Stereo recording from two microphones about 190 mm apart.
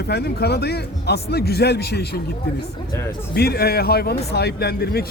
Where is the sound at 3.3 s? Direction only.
55° left (ahead or behind).